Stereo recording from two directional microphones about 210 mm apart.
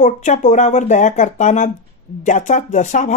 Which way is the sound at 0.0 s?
35° left (ahead or behind).